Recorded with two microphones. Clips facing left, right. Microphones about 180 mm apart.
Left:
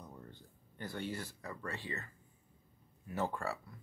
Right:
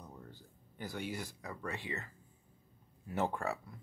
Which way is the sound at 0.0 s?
5° right (ahead or behind).